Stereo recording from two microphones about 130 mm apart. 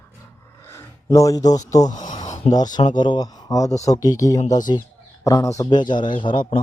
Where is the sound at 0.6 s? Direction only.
20° left (ahead or behind).